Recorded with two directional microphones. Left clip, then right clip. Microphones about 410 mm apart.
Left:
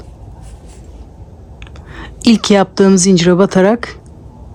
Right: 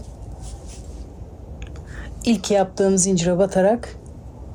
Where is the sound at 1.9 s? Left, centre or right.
Centre.